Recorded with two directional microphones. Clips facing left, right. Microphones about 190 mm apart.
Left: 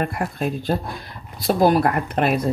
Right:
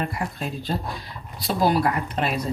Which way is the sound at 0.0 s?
55° left (ahead or behind).